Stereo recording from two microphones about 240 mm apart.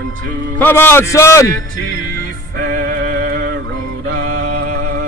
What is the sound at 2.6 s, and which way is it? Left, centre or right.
Music, right.